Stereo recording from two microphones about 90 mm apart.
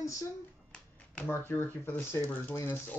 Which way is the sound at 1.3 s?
25° left (ahead or behind).